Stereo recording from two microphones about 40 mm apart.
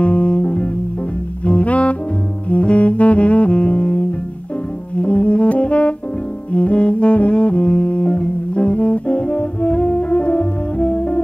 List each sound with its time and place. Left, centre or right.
0.0 s music: left
2.5 s saxophone: left
6.5 s music: left